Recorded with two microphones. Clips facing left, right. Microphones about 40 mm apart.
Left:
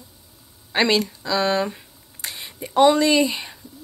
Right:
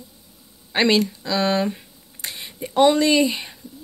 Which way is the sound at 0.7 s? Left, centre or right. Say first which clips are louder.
Right 1 dB; centre.